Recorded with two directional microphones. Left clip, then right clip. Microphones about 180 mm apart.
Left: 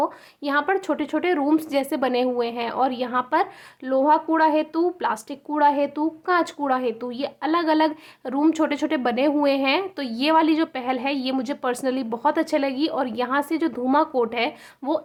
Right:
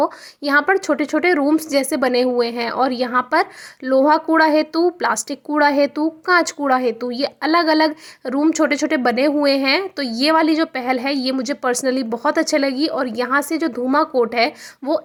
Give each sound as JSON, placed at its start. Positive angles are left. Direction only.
{"t": 0.0, "sound": "a woman's voice", "side_deg": -25}